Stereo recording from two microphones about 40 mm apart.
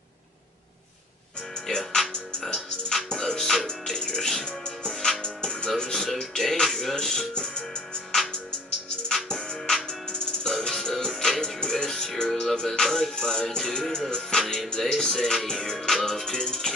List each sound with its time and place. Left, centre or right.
1.7 s speech: centre
3.1 s music: centre
9.1 s music: centre
12.8 s music: centre
13.1 s music: centre